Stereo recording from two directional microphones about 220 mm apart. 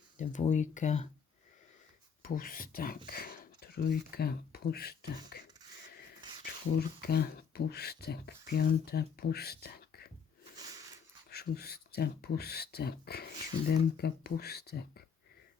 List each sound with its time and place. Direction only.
0.2 s speech: 35° left (ahead or behind)
2.2 s speech: 40° left (ahead or behind)
6.4 s speech: 45° left (ahead or behind)
10.6 s a sound: 15° right (ahead or behind)
11.3 s speech: 45° left (ahead or behind)